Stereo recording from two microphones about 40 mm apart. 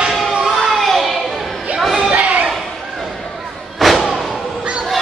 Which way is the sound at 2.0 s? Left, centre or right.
Right.